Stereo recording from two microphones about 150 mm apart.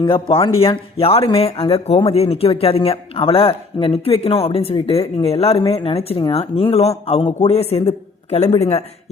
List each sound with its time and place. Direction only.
0.0 s speech: 35° left (ahead or behind)